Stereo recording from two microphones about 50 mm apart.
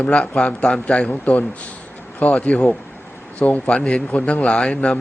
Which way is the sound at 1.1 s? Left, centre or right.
Left.